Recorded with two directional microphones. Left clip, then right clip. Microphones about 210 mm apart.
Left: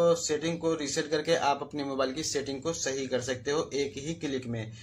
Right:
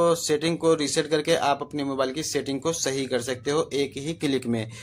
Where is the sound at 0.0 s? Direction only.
40° right (ahead or behind).